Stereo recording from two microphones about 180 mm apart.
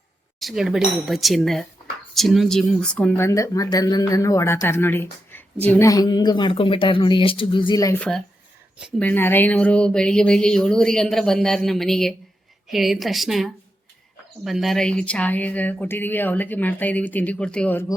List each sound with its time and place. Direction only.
0.3 s speech: centre (ahead or behind)
5.3 s a sound: 10° left (ahead or behind)
5.9 s speech: 20° left (ahead or behind)
7.9 s speech: 5° left (ahead or behind)